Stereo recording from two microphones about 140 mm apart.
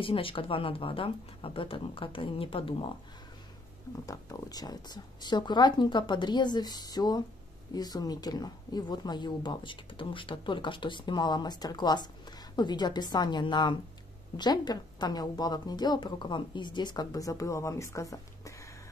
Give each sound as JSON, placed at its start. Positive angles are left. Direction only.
{"t": 0.0, "sound": "speech", "side_deg": 40}
{"t": 4.0, "sound": "a woman's voice", "side_deg": 25}